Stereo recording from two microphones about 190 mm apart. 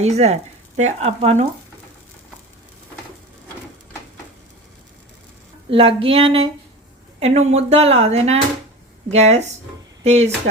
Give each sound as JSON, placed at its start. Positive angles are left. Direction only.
{"t": 0.0, "sound": "speech", "side_deg": -35}
{"t": 5.7, "sound": "a sound", "side_deg": -30}
{"t": 7.2, "sound": "speech", "side_deg": -35}